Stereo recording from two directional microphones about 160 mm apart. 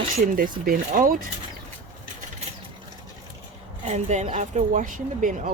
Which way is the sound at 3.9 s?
45° right (ahead or behind).